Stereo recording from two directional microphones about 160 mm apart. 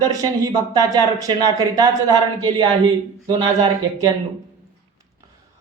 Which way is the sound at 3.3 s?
25° right (ahead or behind).